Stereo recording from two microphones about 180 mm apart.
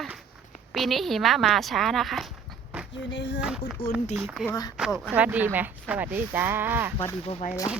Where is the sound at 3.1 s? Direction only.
80° left.